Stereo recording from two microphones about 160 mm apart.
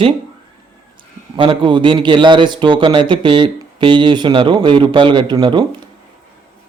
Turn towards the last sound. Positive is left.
turn(degrees=-25)  # may be behind; listen again after turning